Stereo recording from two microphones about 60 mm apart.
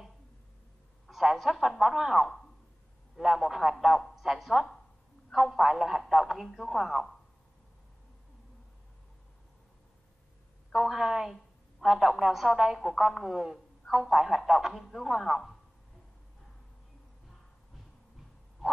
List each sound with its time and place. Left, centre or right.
1.1 s a woman's voice: centre
10.7 s a woman's voice: centre
18.6 s bow-wow: centre